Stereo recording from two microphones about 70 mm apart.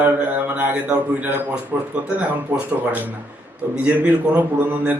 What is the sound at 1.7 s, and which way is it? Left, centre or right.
Speech, right.